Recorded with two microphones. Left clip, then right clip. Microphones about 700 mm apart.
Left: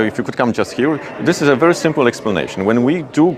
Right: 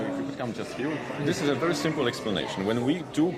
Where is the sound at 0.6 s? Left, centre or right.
Left.